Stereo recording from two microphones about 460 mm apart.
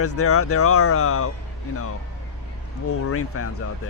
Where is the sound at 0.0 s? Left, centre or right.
Left.